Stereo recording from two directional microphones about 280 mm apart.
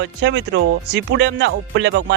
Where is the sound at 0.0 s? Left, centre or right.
Right.